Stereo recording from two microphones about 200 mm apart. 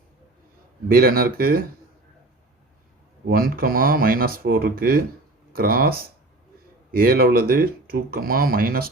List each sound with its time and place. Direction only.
0.9 s speech: 45° right (ahead or behind)
3.2 s speech: 45° right (ahead or behind)